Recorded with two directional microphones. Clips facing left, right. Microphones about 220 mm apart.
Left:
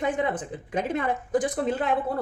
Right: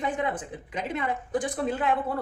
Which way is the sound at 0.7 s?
50° left (ahead or behind).